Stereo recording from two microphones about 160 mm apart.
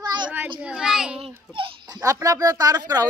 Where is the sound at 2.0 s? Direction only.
20° right (ahead or behind).